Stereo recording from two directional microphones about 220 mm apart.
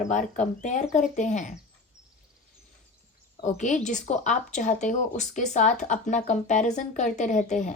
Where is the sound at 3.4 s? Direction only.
35° left (ahead or behind).